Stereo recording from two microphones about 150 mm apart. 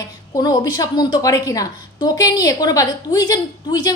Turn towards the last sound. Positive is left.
turn(degrees=25)  # may be behind; listen again after turning